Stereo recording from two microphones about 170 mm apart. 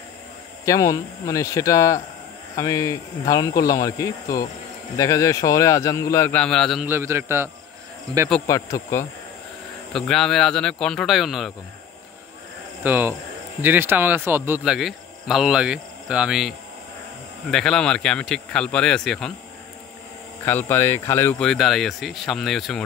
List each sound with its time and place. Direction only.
0.7 s speech: 20° left (ahead or behind)
6.4 s speech: 5° left (ahead or behind)
6.9 s a man's voice: 15° right (ahead or behind)
8.5 s speech: 20° left (ahead or behind)
9.9 s speech: 5° left (ahead or behind)
12.8 s a man's voice: 10° right (ahead or behind)
20.4 s speech: 10° left (ahead or behind)